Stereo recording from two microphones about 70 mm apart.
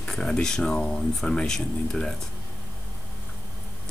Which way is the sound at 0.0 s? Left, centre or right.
Centre.